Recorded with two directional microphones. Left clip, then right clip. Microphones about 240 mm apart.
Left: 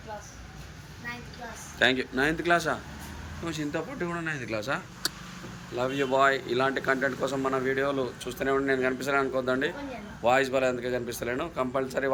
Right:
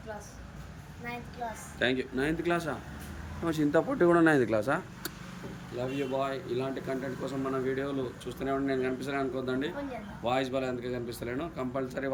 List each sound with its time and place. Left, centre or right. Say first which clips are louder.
1.8 s speech: left 5 dB; centre
3.4 s speech: right 5 dB; right
5.7 s speech: left 6 dB; centre